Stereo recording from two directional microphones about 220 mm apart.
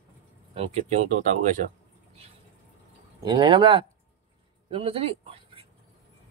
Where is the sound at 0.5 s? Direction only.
30° right (ahead or behind).